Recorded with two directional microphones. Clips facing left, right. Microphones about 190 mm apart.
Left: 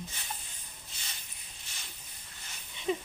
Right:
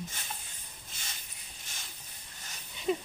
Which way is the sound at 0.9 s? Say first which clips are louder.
Right 2 dB; 50° right (ahead or behind).